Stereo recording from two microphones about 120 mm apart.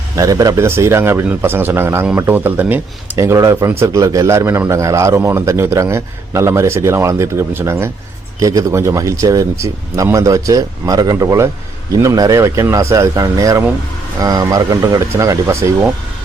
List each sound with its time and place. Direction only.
0.2 s a man's voice: 30° right (ahead or behind)